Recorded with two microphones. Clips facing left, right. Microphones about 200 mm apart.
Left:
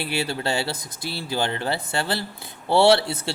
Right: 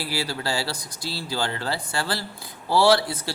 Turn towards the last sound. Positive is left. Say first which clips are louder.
# left 2 dB
turn(degrees=25)  # may be behind; listen again after turning